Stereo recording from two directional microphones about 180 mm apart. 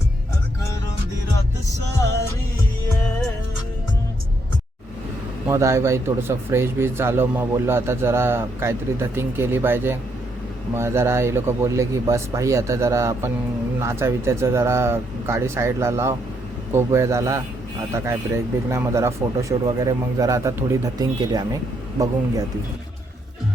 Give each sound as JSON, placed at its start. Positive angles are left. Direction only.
{"t": 5.5, "sound": "a man's voice", "side_deg": -15}